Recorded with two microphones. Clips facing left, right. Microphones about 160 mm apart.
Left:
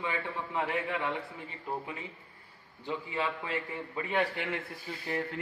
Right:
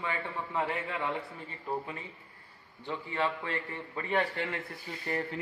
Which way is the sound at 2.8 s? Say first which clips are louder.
Right 1 dB; 10° left (ahead or behind).